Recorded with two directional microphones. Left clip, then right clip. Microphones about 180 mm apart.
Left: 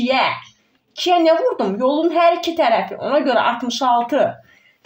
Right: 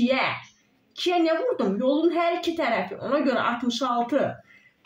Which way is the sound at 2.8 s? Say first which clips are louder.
Left 7 dB; 15° right (ahead or behind).